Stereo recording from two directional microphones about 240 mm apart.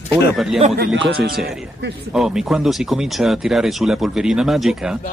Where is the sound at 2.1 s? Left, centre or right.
Centre.